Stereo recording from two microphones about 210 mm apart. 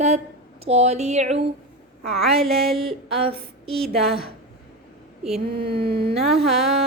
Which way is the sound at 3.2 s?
25° right (ahead or behind).